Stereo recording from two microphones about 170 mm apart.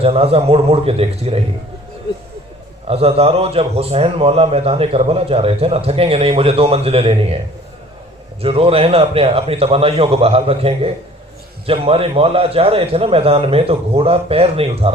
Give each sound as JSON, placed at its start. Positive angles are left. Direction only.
{"t": 0.0, "sound": "a man's voice", "side_deg": -35}
{"t": 2.8, "sound": "a man's voice", "side_deg": -35}
{"t": 8.4, "sound": "a man's voice", "side_deg": -35}